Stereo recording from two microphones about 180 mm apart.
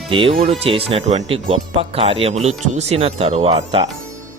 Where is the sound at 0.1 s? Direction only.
30° right (ahead or behind).